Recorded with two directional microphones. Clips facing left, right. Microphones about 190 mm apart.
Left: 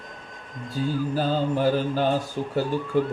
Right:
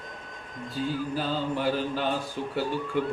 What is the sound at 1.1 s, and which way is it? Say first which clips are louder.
Speech: left 5 dB; 40° left (ahead or behind).